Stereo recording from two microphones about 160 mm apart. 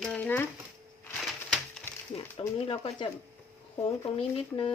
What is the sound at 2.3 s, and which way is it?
Speech, 35° left (ahead or behind).